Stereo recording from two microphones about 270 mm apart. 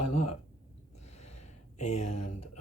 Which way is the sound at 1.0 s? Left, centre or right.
Left.